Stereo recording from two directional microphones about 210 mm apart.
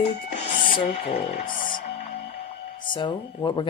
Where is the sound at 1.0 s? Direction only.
35° left (ahead or behind).